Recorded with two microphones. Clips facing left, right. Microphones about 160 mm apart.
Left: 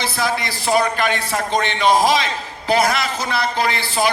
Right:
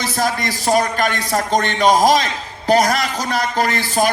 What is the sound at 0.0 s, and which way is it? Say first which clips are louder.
A man's voice: right 2 dB; 40° right (ahead or behind).